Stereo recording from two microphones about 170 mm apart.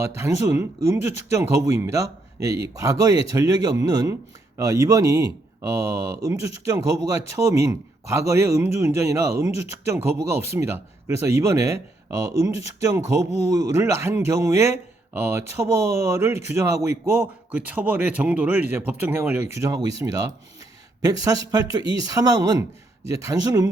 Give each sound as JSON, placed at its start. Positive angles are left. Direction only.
{"t": 0.0, "sound": "speech", "side_deg": -15}